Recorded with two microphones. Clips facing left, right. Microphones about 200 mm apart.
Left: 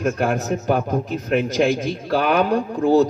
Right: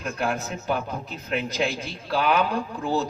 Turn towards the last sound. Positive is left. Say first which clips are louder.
# left 10 dB
turn(degrees=50)  # may be behind; listen again after turning